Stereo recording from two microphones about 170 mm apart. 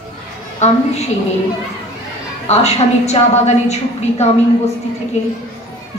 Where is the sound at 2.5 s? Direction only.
40° left (ahead or behind).